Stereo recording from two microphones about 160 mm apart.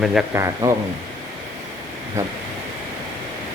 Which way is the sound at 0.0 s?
5° right (ahead or behind).